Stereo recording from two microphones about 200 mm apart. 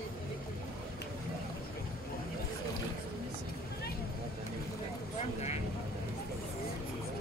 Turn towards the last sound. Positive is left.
turn(degrees=35)  # may be behind; listen again after turning